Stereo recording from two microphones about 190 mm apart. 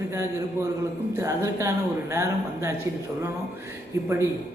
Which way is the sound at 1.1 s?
15° right (ahead or behind).